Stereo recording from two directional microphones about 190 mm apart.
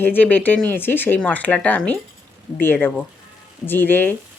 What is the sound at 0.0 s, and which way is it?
Speech, 10° left (ahead or behind).